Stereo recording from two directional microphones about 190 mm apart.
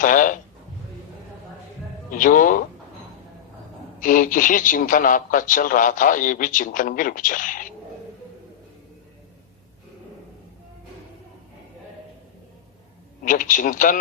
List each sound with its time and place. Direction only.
0.0 s a man's voice: 45° left (ahead or behind)
2.0 s a man's voice: 45° left (ahead or behind)
4.0 s a man's voice: 45° left (ahead or behind)
13.2 s a man's voice: 45° left (ahead or behind)